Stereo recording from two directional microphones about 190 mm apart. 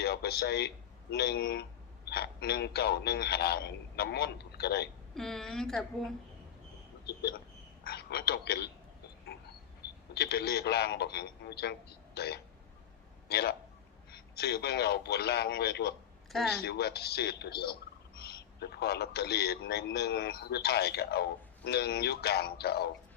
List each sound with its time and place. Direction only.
0.0 s a man's voice: 60° left (ahead or behind)
5.1 s a woman's voice: centre (ahead or behind)
7.0 s a man's voice: 60° left (ahead or behind)
10.2 s a man's voice: 55° left (ahead or behind)